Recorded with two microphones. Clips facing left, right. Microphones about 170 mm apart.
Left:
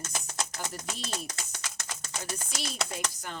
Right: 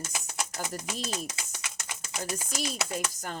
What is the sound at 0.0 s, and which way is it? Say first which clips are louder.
Typewriter: even; 10° right (ahead or behind).